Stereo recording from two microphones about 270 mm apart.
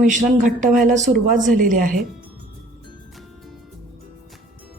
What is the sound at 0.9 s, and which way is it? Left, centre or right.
Speech, right.